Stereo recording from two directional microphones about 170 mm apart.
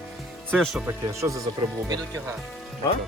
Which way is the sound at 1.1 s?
20° right (ahead or behind).